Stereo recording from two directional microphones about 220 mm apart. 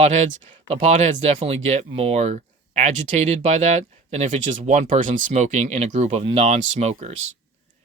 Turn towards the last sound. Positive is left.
turn(degrees=-30)  # may be behind; listen again after turning